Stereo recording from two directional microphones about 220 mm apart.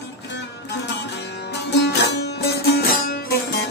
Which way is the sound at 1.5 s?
50° left (ahead or behind).